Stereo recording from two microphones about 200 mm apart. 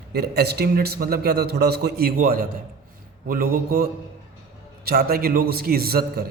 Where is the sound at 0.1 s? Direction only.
55° right (ahead or behind).